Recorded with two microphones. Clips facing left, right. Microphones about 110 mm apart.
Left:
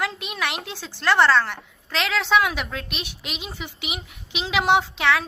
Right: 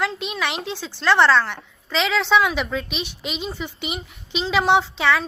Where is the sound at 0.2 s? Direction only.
60° left (ahead or behind).